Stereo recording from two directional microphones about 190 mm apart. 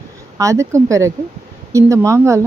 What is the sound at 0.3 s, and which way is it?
Speech, 15° right (ahead or behind).